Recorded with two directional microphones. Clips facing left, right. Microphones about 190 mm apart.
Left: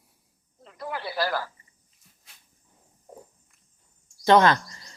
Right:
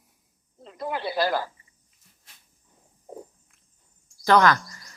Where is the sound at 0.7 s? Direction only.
20° right (ahead or behind).